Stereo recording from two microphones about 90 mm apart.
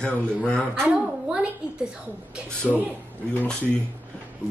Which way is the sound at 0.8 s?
10° right (ahead or behind).